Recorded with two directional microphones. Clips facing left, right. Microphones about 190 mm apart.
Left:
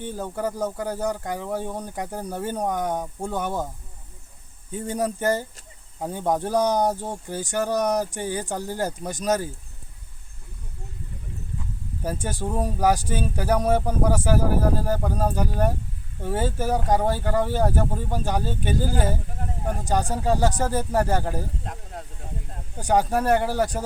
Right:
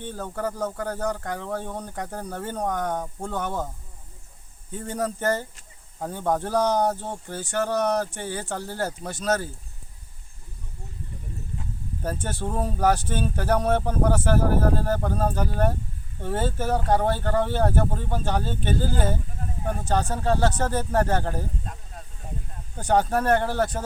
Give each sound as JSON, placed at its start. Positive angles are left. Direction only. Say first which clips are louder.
{"t": 0.0, "sound": "speech", "louder": "left 2 dB", "side_deg": 10}
{"t": 4.7, "sound": "speech", "louder": "left 2 dB", "side_deg": 15}
{"t": 12.0, "sound": "speech", "louder": "left 1 dB", "side_deg": 10}
{"t": 21.6, "sound": "snake", "louder": "left 4 dB", "side_deg": 75}
{"t": 22.8, "sound": "speech", "louder": "even", "side_deg": 10}